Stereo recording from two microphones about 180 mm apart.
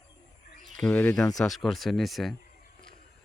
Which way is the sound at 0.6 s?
5° left (ahead or behind).